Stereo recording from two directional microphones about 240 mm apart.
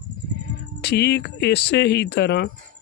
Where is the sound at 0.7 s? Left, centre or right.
Left.